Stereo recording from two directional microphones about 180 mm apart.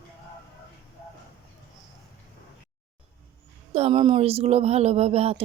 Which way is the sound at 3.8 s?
30° right (ahead or behind).